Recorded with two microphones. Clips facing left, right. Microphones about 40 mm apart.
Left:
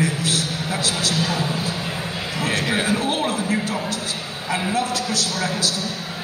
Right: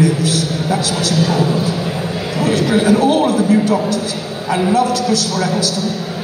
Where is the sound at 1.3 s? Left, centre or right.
Right.